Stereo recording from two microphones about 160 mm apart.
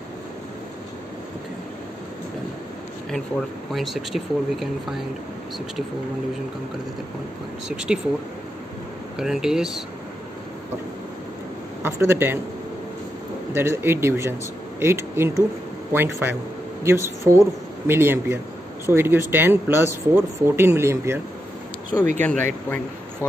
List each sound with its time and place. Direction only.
3.7 s speech: centre (ahead or behind)
7.6 s speech: 5° right (ahead or behind)
9.2 s speech: 5° right (ahead or behind)
11.8 s speech: 15° right (ahead or behind)
13.6 s speech: 15° right (ahead or behind)
22.2 s speech: 10° left (ahead or behind)